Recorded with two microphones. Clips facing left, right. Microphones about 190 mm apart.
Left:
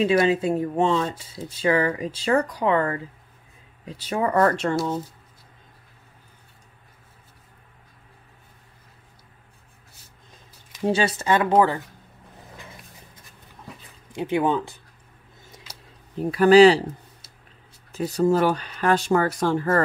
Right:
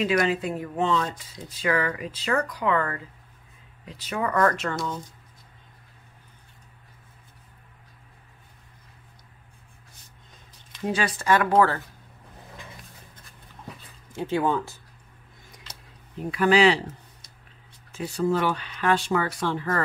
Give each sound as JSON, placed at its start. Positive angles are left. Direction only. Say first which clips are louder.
{"t": 0.0, "sound": "speech", "louder": "left 4 dB", "side_deg": 30}
{"t": 10.9, "sound": "speech", "louder": "left 2 dB", "side_deg": 25}
{"t": 14.1, "sound": "speech", "louder": "left 2 dB", "side_deg": 15}
{"t": 16.2, "sound": "speech", "louder": "left 7 dB", "side_deg": 35}
{"t": 17.9, "sound": "speech", "louder": "left 5 dB", "side_deg": 40}